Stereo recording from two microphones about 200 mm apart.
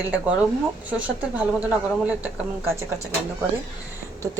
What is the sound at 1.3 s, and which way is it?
A woman's voice, 5° right (ahead or behind).